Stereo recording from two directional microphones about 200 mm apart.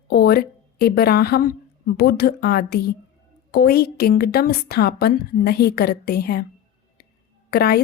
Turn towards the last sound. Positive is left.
turn(degrees=50)  # may be behind; listen again after turning